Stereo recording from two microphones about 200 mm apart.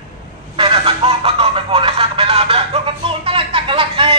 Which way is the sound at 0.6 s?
25° right (ahead or behind).